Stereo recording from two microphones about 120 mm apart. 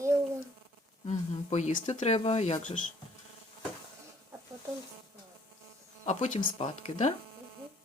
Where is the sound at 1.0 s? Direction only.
70° left (ahead or behind).